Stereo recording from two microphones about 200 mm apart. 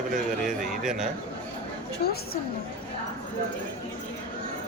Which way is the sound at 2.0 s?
55° left (ahead or behind).